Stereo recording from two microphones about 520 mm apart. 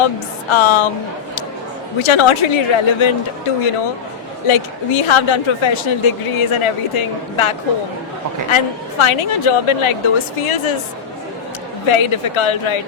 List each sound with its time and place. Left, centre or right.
0.5 s speech: left
2.0 s speech: left
4.4 s speech: left
11.9 s speech: left